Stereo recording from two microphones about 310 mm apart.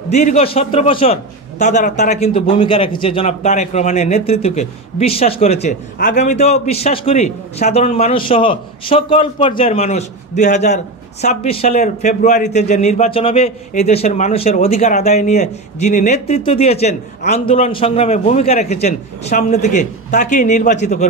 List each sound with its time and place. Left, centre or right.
0.1 s a man's voice: left